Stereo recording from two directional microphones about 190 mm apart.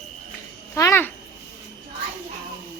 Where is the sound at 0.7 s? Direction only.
15° left (ahead or behind).